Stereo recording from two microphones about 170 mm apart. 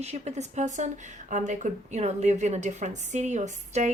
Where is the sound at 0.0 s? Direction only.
40° right (ahead or behind).